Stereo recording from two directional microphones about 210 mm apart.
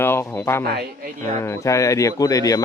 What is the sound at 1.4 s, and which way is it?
A man's voice, 15° left (ahead or behind).